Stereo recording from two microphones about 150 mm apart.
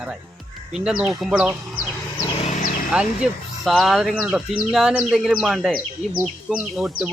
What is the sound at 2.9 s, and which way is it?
Speech, 5° right (ahead or behind).